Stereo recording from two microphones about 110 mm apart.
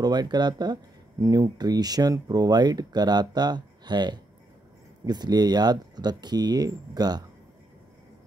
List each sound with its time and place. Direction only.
0.0 s speech: 40° right (ahead or behind)